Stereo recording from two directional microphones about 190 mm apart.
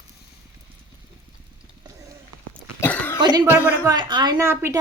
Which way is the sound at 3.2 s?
20° right (ahead or behind).